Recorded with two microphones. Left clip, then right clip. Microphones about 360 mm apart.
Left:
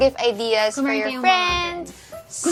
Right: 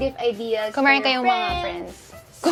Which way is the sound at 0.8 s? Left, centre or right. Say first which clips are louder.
Right 5 dB; right.